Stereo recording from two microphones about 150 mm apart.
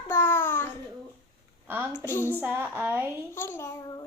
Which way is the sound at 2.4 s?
15° right (ahead or behind).